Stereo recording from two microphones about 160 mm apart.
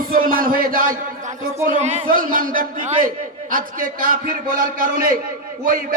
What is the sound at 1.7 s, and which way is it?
Speech, 45° right (ahead or behind).